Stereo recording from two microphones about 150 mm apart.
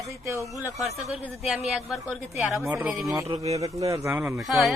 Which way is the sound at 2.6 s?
20° right (ahead or behind).